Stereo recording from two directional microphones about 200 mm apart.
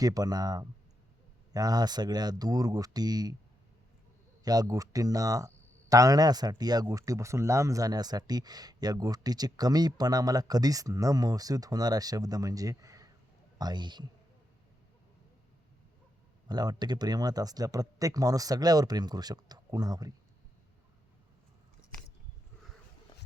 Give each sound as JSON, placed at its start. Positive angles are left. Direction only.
{"t": 0.0, "sound": "speech", "side_deg": -20}
{"t": 4.4, "sound": "speech", "side_deg": -15}
{"t": 16.5, "sound": "speech", "side_deg": -20}